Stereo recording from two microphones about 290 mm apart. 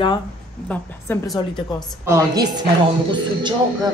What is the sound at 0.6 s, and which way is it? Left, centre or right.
Speech, centre.